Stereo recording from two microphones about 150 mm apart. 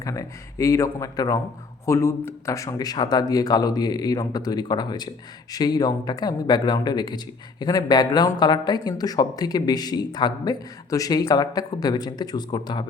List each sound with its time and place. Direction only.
0.0 s speech: 20° left (ahead or behind)